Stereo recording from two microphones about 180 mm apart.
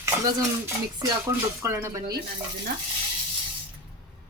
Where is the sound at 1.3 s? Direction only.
15° right (ahead or behind).